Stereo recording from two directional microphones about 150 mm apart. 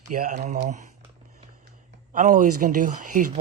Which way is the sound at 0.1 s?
55° right (ahead or behind).